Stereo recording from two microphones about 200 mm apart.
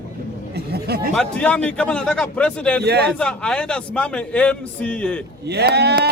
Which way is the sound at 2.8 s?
55° right (ahead or behind).